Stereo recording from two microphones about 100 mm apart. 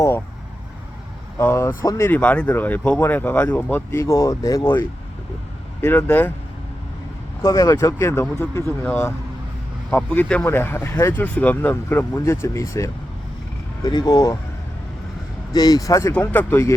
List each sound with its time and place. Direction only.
1.4 s speech: 25° left (ahead or behind)
2.0 s speech: 15° left (ahead or behind)
4.0 s speech: 30° left (ahead or behind)
5.8 s speech: 20° left (ahead or behind)
7.4 s speech: 30° left (ahead or behind)
9.9 s speech: 15° left (ahead or behind); by 12.9 s 30° left (ahead or behind)
13.8 s speech: 40° left (ahead or behind)
15.5 s speech: 40° left (ahead or behind)
16.3 s speech: 20° left (ahead or behind)